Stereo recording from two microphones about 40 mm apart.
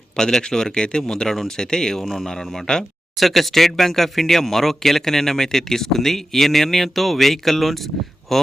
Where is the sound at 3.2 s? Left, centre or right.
Centre.